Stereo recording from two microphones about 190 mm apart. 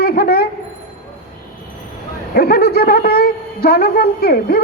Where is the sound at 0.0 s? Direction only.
55° left (ahead or behind).